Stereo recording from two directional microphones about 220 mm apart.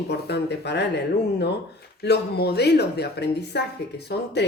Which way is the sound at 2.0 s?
45° left (ahead or behind).